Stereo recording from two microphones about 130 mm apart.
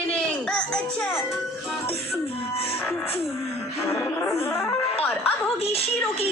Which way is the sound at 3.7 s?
25° left (ahead or behind).